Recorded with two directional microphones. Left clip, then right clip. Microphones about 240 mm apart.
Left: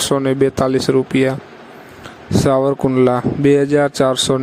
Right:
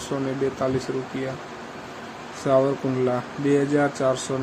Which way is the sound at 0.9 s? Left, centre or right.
Left.